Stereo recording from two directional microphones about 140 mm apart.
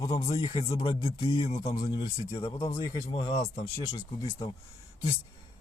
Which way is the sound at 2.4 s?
35° left (ahead or behind).